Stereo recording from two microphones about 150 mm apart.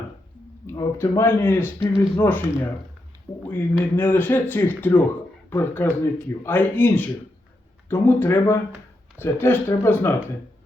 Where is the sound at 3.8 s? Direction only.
15° left (ahead or behind).